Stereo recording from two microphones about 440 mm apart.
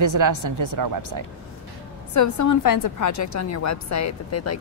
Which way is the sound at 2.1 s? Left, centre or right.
Left.